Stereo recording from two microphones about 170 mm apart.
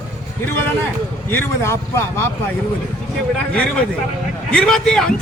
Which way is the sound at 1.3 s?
15° left (ahead or behind).